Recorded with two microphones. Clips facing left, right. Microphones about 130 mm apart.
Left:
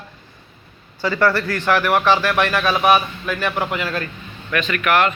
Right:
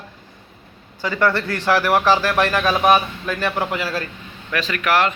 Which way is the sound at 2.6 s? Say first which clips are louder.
Even; 5° left (ahead or behind).